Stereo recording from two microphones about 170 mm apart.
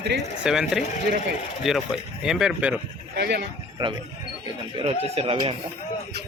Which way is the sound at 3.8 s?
25° right (ahead or behind).